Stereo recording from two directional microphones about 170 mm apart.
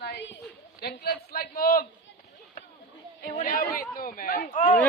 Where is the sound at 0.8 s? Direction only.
65° left (ahead or behind).